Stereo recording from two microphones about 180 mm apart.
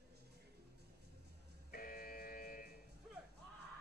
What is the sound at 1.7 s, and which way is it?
Buzzer, 50° left (ahead or behind).